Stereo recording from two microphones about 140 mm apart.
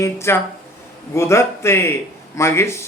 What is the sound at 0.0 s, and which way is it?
A man's voice, 20° left (ahead or behind).